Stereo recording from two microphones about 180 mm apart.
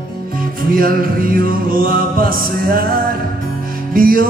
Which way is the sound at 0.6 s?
55° right (ahead or behind).